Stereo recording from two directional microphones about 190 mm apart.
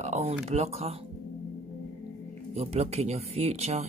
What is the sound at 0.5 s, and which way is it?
Speech, 35° right (ahead or behind).